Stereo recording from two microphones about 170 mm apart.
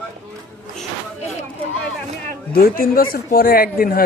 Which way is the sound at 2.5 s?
60° left (ahead or behind).